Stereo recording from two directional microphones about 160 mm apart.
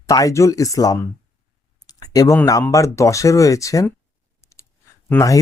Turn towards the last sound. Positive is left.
turn(degrees=20)  # may be behind; listen again after turning